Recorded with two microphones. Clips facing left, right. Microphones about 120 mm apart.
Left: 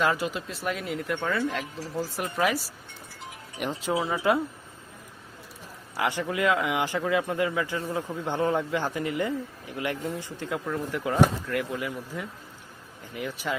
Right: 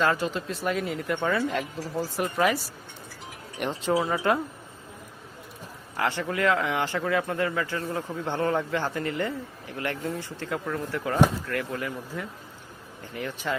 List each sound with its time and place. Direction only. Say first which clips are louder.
0.0 s speech: right 1 dB; 10° left (ahead or behind)
6.0 s a man's voice: even; 15° left (ahead or behind)